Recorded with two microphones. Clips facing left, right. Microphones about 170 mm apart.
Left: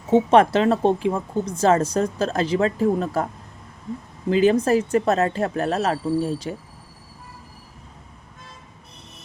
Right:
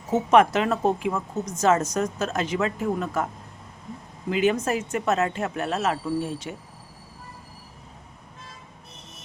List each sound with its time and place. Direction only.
0.1 s speech: 30° left (ahead or behind)
4.3 s speech: 35° left (ahead or behind)